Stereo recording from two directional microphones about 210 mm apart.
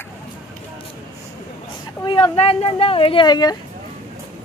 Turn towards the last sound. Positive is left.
turn(degrees=20)  # may be behind; listen again after turning